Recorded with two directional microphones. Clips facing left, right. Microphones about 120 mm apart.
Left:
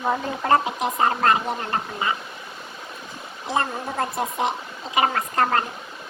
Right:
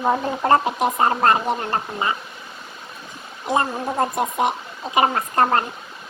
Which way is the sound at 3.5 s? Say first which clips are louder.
Right 4 dB; 20° right (ahead or behind).